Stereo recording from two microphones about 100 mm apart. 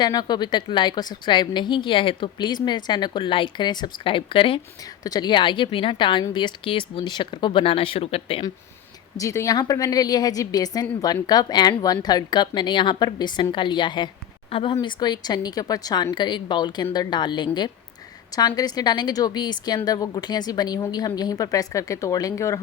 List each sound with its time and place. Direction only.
0.0 s a woman's voice: 40° left (ahead or behind); by 4.6 s 60° left (ahead or behind)
5.0 s a woman's voice: 45° left (ahead or behind); by 8.4 s 75° left (ahead or behind)
9.1 s a woman's voice: 30° left (ahead or behind)